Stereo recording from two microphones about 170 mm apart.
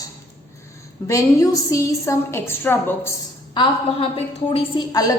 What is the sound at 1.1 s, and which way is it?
A woman's voice, 20° left (ahead or behind).